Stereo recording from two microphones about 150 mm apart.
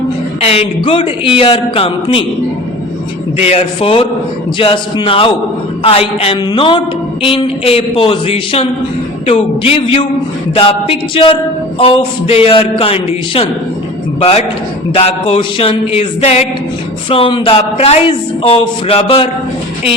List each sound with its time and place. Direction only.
0.4 s speech: 40° left (ahead or behind)
3.3 s a man's voice: 45° left (ahead or behind)